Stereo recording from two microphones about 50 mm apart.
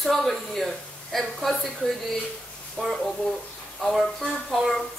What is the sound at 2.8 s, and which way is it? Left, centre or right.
A woman's voice, centre.